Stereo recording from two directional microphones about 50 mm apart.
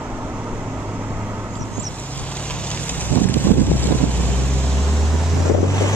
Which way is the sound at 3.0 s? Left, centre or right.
Left.